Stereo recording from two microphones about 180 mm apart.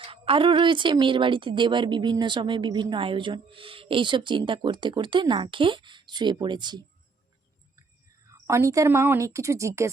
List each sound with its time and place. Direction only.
0.0 s a woman's voice: 30° right (ahead or behind)
8.3 s a woman's voice: 15° right (ahead or behind)